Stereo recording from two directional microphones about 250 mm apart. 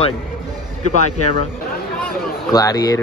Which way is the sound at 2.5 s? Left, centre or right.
Centre.